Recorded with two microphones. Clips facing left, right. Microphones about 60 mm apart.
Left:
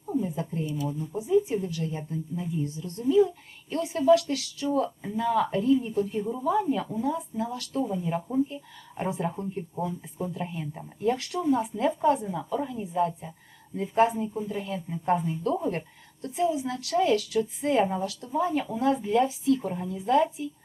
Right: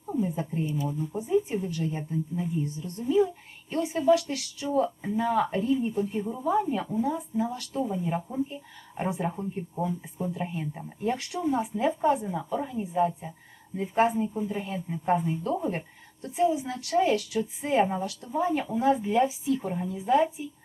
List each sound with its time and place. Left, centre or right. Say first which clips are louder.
0.3 s speech: right 1 dB; right
1.4 s a woman's voice: left 3 dB; centre
6.5 s a woman's voice: even; centre
9.7 s a woman's voice: right 3 dB; centre